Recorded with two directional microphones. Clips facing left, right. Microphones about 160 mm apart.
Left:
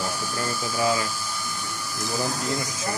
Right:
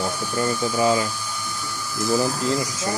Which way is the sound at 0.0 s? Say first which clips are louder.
Right 5 dB; 10° left (ahead or behind).